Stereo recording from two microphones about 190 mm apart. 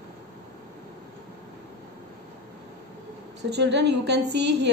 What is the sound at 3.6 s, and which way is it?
A woman's voice, 65° right (ahead or behind).